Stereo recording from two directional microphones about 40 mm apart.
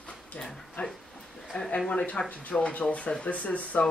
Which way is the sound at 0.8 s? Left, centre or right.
Left.